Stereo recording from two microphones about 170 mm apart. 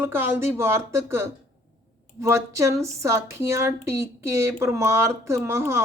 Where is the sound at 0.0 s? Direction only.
15° right (ahead or behind).